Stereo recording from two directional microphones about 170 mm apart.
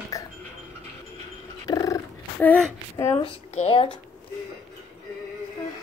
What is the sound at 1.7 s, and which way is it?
Purr, 20° left (ahead or behind).